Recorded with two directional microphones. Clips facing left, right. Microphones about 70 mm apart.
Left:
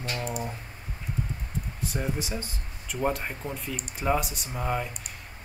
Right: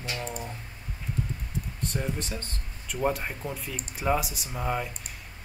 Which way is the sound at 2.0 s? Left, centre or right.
Centre.